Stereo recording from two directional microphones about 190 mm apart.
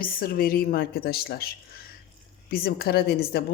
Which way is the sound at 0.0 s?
50° left (ahead or behind).